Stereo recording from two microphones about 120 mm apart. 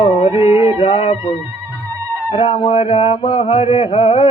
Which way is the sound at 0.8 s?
50° left (ahead or behind).